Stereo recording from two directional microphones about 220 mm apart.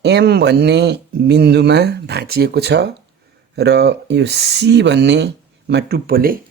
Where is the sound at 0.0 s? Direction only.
50° right (ahead or behind).